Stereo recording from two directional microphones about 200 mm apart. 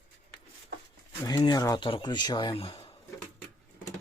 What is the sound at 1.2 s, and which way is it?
Speech, 20° left (ahead or behind).